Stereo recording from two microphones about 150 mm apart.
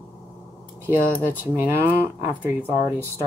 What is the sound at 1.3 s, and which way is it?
Speech, 15° right (ahead or behind).